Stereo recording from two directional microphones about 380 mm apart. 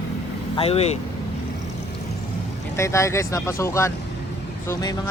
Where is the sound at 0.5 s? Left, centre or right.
Centre.